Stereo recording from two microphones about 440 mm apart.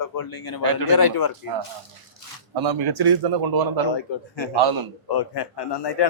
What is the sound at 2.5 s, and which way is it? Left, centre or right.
Speech, right.